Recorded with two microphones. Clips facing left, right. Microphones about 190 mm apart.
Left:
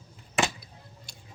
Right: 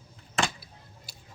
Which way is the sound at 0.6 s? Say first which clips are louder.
Left 2 dB; 5° right (ahead or behind).